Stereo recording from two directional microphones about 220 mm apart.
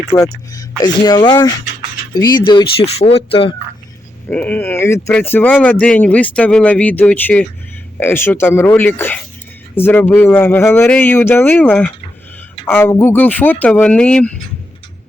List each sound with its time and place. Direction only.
0.0 s speech: 15° left (ahead or behind)
4.3 s speech: 5° left (ahead or behind)